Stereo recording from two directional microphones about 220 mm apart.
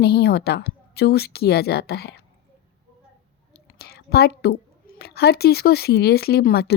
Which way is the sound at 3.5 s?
45° left (ahead or behind).